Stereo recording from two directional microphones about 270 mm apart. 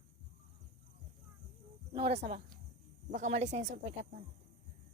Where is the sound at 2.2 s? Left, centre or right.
Right.